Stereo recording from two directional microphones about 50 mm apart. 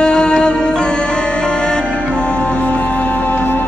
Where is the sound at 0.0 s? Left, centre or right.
Centre.